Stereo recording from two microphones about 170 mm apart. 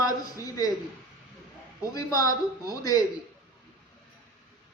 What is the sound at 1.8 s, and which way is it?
A man's voice, 20° left (ahead or behind).